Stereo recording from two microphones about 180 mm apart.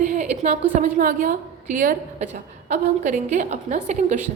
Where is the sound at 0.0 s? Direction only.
45° right (ahead or behind).